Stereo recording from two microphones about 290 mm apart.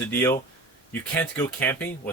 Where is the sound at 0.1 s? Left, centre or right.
Centre.